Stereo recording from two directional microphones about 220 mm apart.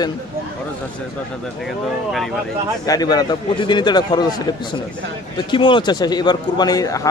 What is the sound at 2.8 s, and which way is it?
A man's voice, 15° left (ahead or behind).